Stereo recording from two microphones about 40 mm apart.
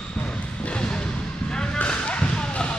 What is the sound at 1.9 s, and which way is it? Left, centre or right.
Basketball bounce, left.